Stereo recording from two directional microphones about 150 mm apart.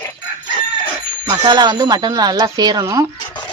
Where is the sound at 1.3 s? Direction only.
30° right (ahead or behind).